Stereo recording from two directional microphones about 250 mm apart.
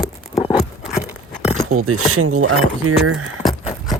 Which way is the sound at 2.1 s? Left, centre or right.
Right.